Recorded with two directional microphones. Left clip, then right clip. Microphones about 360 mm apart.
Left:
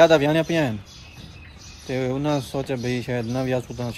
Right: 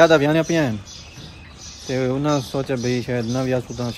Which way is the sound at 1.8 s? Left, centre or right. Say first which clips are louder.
Right 3 dB; centre.